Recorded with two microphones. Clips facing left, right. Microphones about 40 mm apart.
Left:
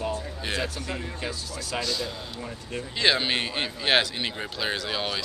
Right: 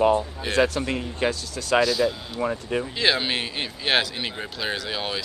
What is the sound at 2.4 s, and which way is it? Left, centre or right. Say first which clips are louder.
Speech: right 13 dB; right.